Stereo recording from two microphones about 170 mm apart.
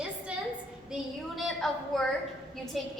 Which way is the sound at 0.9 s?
Centre (ahead or behind).